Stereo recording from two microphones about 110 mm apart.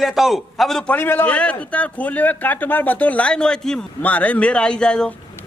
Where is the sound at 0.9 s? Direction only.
15° left (ahead or behind).